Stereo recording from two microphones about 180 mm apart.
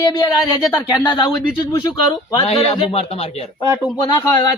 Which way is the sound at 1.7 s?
20° left (ahead or behind).